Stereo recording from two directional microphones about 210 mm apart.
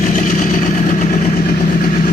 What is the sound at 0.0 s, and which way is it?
Vehicle, 40° left (ahead or behind).